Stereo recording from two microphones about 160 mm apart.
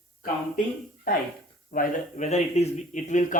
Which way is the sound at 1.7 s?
60° left (ahead or behind).